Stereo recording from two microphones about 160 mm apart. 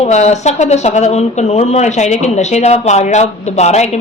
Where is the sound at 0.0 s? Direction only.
45° left (ahead or behind).